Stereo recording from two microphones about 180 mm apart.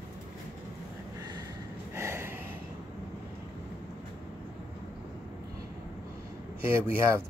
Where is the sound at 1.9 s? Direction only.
15° right (ahead or behind).